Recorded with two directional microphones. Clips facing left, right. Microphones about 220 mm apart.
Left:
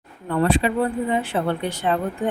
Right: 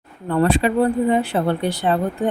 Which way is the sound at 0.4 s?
40° right (ahead or behind).